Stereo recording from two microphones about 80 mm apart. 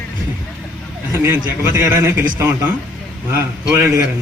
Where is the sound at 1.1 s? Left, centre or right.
Right.